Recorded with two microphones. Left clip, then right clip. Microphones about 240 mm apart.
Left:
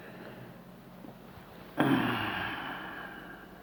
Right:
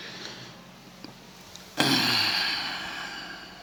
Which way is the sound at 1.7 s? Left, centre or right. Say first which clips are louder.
Right 6 dB; centre.